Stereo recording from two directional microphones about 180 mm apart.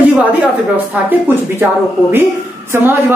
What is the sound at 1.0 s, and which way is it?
Speech, 10° right (ahead or behind).